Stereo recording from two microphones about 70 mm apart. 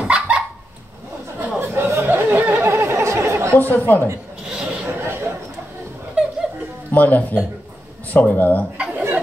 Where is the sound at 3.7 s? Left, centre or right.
Left.